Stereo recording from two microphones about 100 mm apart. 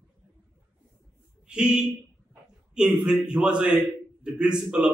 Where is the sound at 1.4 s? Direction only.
10° right (ahead or behind).